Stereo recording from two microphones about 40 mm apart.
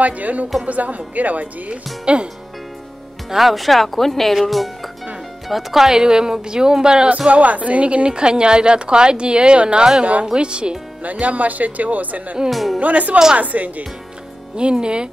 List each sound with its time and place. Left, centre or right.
0.0 s a woman's voice: right
3.3 s speech: centre
7.2 s a woman's voice: right
11.0 s speech: right
12.4 s speech: centre
12.7 s speech: right
14.6 s a woman's voice: right